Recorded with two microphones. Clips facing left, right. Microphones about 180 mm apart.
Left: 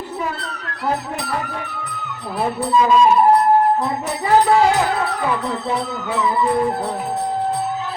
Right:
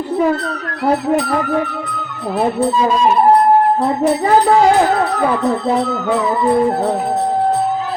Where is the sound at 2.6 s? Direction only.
35° right (ahead or behind).